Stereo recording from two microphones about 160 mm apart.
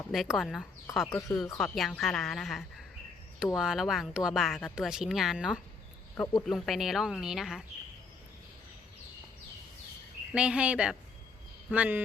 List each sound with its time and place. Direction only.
0.1 s speech: centre (ahead or behind)
1.0 s speech: 15° left (ahead or behind)
1.5 s speech: centre (ahead or behind)
10.3 s speech: 5° right (ahead or behind)